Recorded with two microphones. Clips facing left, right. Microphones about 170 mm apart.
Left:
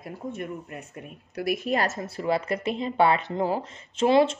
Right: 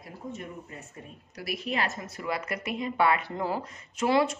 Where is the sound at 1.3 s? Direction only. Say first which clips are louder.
Left 6 dB; 50° left (ahead or behind).